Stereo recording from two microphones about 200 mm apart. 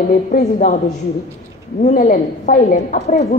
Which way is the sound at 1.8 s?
40° left (ahead or behind).